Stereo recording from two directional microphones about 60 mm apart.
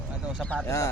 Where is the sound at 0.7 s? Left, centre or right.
Left.